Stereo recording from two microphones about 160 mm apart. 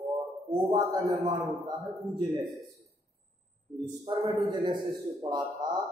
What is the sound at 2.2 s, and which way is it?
Speech, 30° right (ahead or behind).